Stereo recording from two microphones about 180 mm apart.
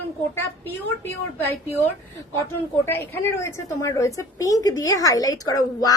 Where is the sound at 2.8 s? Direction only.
10° left (ahead or behind).